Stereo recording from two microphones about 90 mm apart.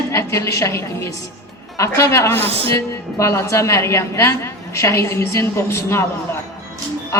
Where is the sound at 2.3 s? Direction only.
90° right.